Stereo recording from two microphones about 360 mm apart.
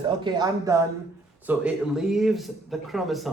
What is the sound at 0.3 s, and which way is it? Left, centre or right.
Speech, centre.